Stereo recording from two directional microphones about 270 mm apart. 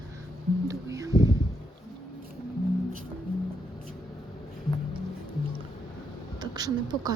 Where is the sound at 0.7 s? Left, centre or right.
Centre.